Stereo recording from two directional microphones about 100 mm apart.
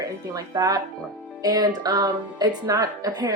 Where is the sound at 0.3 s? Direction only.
40° right (ahead or behind).